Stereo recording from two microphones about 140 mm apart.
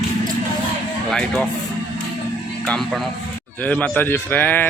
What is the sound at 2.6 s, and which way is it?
Speech, centre (ahead or behind).